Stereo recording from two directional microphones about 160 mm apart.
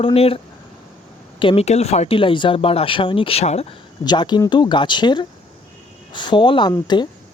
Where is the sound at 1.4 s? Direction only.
35° left (ahead or behind).